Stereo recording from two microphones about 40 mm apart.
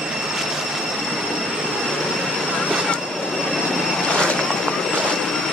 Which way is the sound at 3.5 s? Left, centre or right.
Centre.